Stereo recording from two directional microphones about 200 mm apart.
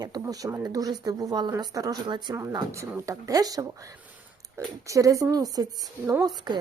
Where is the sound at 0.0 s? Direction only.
20° right (ahead or behind).